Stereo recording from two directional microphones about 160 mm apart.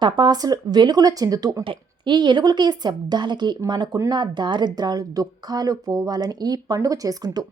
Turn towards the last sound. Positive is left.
turn(degrees=-25)  # may be behind; listen again after turning